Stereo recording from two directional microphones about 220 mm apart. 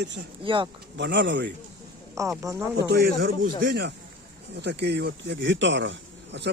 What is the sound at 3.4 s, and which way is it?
Speech, 45° right (ahead or behind).